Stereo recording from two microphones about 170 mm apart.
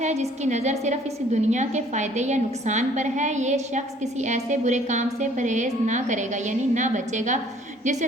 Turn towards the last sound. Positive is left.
turn(degrees=-45)  # may be behind; listen again after turning